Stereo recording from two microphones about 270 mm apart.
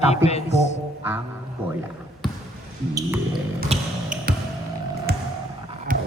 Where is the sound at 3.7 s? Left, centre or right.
Right.